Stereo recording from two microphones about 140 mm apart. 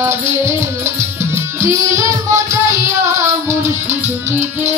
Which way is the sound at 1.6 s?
20° right (ahead or behind).